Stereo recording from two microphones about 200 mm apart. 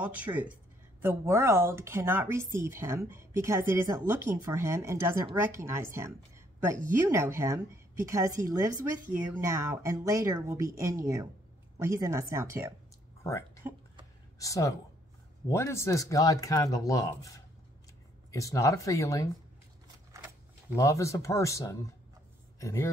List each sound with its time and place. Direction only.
0.0 s speech: 10° right (ahead or behind)
13.2 s a sound: 15° left (ahead or behind)
14.4 s speech: 15° left (ahead or behind)
18.3 s speech: 15° left (ahead or behind)
20.7 s speech: 15° left (ahead or behind)